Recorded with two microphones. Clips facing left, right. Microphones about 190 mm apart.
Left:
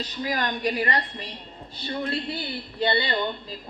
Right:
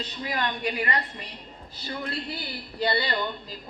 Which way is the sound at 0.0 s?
40° left (ahead or behind).